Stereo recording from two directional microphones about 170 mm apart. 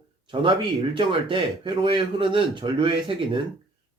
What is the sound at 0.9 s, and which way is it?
A man's voice, 30° right (ahead or behind).